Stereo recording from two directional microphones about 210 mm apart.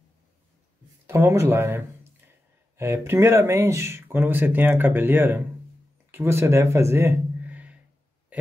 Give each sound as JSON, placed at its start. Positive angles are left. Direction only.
{"t": 1.0, "sound": "speech", "side_deg": -10}
{"t": 2.8, "sound": "speech", "side_deg": -10}